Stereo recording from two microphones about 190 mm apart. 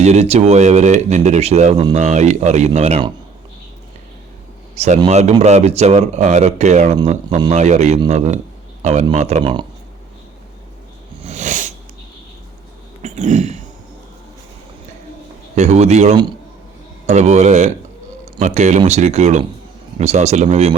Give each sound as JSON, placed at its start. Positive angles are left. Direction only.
{"t": 0.0, "sound": "speech", "side_deg": -35}
{"t": 4.7, "sound": "a man's voice", "side_deg": -35}
{"t": 9.4, "sound": "speech", "side_deg": -25}
{"t": 11.2, "sound": "a sound", "side_deg": -35}
{"t": 13.0, "sound": "a sound", "side_deg": -40}
{"t": 15.5, "sound": "speech", "side_deg": -35}